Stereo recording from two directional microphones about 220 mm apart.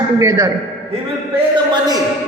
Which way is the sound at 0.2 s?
15° right (ahead or behind).